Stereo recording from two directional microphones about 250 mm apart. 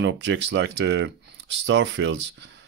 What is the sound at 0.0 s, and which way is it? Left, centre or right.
Speech, right.